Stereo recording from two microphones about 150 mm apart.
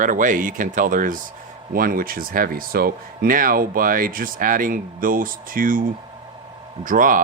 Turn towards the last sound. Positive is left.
turn(degrees=-65)  # may be behind; listen again after turning